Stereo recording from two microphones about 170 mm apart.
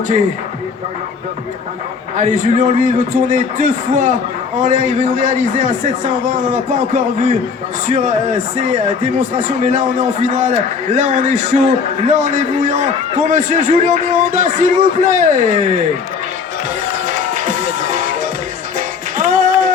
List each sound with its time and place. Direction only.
2.1 s a man's voice: 45° right (ahead or behind)
17.1 s music: 50° right (ahead or behind)